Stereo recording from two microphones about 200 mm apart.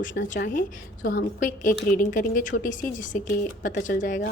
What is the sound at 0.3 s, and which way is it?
A woman's voice, 40° left (ahead or behind).